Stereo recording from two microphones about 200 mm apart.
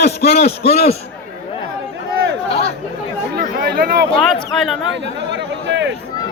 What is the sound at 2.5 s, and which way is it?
Chatter, 30° left (ahead or behind).